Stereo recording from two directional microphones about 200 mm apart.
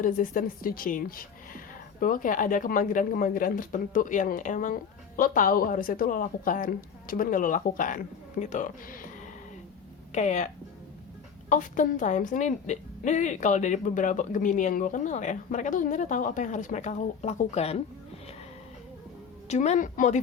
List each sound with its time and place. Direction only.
0.0 s a woman's voice: 40° left (ahead or behind)
19.5 s a woman's voice: 35° left (ahead or behind)